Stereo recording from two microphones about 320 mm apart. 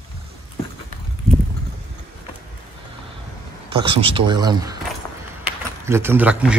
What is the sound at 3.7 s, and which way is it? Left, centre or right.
Speech, centre.